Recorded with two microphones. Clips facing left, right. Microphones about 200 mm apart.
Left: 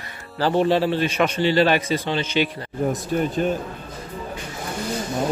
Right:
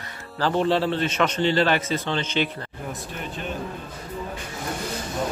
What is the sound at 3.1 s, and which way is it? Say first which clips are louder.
Speech: left 12 dB; 40° left (ahead or behind).